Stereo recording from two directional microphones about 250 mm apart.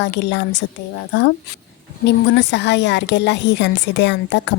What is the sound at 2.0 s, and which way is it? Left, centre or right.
Speech, left.